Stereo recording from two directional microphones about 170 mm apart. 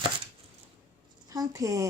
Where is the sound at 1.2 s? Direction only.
20° right (ahead or behind).